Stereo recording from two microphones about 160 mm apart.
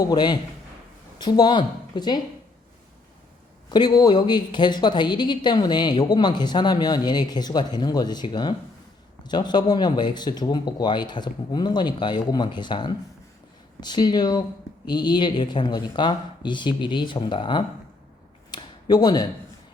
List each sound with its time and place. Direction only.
0.0 s a woman's voice: 25° left (ahead or behind)
3.7 s a woman's voice: 25° left (ahead or behind)
18.5 s a sound: 25° left (ahead or behind)